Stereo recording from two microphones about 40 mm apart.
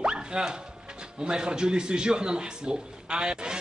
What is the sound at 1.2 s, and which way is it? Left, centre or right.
A man's voice, centre.